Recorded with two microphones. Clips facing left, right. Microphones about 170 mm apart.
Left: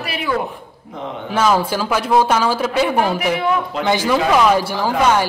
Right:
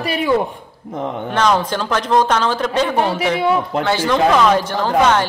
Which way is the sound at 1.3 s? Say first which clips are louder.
Left 1 dB; 5° left (ahead or behind).